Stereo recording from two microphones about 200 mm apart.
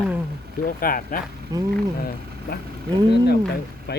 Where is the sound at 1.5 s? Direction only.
15° right (ahead or behind).